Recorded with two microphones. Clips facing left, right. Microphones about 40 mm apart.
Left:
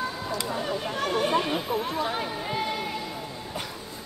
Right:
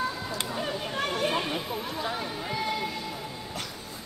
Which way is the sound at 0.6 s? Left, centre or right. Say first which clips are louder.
Left 2 dB; centre.